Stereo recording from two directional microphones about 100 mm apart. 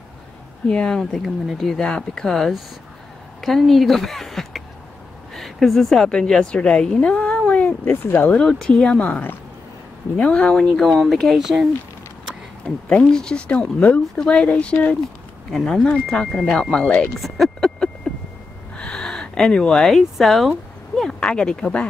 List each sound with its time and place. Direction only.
0.7 s a woman's voice: 10° left (ahead or behind)
7.8 s speech: 20° left (ahead or behind)
8.4 s speech: 5° left (ahead or behind)
12.6 s speech: 10° left (ahead or behind)
18.1 s a sound: 5° left (ahead or behind)
18.8 s speech: 5° left (ahead or behind)